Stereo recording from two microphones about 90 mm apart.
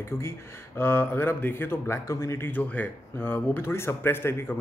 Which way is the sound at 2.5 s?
15° left (ahead or behind).